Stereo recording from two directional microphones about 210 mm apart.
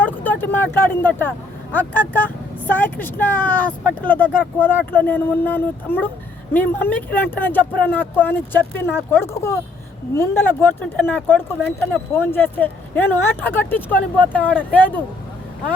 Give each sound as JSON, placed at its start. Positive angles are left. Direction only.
{"t": 0.0, "sound": "speech", "side_deg": 10}